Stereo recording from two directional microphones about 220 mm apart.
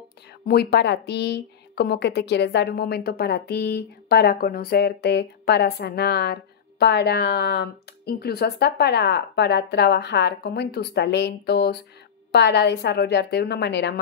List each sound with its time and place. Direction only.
0.5 s a woman's voice: 45° left (ahead or behind)